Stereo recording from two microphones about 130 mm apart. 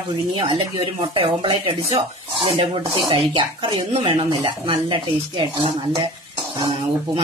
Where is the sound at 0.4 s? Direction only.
40° right (ahead or behind).